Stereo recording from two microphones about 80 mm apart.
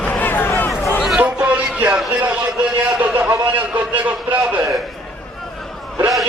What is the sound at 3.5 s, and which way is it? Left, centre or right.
A man's voice, centre.